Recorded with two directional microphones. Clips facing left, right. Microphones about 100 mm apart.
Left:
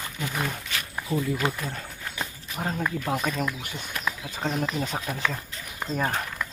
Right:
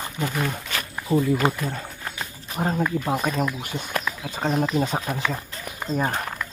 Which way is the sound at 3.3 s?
10° right (ahead or behind).